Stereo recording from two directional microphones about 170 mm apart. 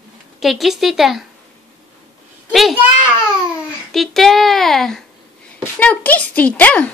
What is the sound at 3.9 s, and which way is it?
A child's voice, centre (ahead or behind).